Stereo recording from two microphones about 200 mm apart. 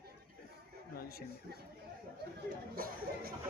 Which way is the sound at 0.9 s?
50° left (ahead or behind).